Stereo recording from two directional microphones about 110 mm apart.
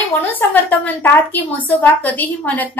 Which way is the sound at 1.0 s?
15° left (ahead or behind).